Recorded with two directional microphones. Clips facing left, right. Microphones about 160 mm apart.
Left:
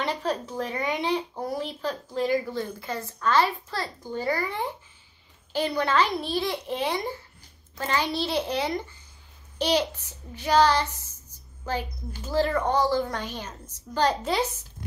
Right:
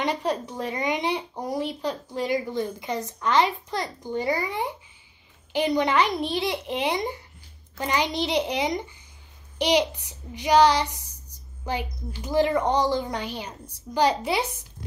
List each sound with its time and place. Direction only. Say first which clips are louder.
0.0 s speech: right 2 dB; 15° right (ahead or behind)
11.3 s a sound: even; 15° right (ahead or behind)
12.2 s speech: right 3 dB; 15° right (ahead or behind)